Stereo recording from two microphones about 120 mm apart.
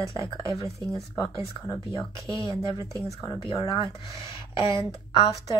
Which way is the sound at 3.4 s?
45° left (ahead or behind).